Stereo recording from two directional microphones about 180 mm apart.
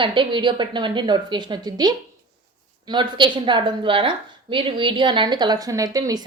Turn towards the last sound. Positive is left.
turn(degrees=-20)  # may be behind; listen again after turning